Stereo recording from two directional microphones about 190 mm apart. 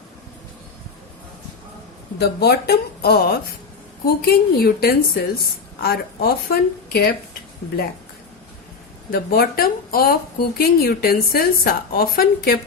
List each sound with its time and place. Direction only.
2.1 s a woman's voice: 60° left (ahead or behind)
9.1 s a woman's voice: 50° left (ahead or behind)